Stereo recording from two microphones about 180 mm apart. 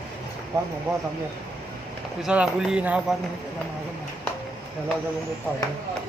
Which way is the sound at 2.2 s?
5° right (ahead or behind).